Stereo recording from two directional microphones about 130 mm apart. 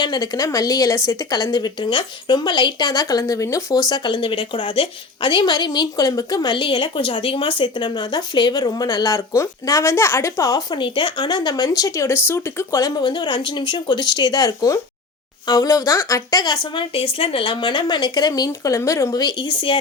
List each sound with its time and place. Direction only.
0.0 s a woman's voice: 30° left (ahead or behind)
13.0 s a woman's voice: 35° left (ahead or behind)
16.7 s a woman's voice: 45° left (ahead or behind)